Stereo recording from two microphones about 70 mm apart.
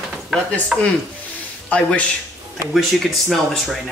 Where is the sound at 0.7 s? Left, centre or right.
Centre.